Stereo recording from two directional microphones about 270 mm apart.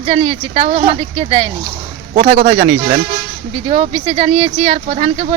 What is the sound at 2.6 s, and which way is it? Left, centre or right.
Speech, centre.